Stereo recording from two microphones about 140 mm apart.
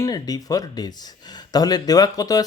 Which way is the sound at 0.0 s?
25° left (ahead or behind).